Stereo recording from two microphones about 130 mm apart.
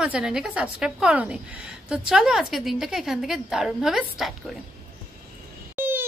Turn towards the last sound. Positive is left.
turn(degrees=-15)  # may be behind; listen again after turning